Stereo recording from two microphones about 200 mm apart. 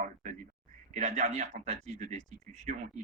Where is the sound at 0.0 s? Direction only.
40° right (ahead or behind).